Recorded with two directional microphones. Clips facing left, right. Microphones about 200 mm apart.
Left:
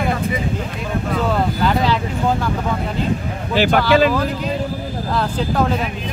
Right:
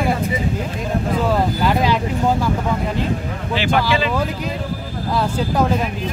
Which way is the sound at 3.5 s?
45° left (ahead or behind).